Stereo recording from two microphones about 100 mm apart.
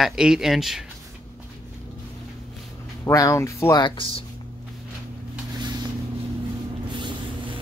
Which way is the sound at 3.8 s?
60° left (ahead or behind).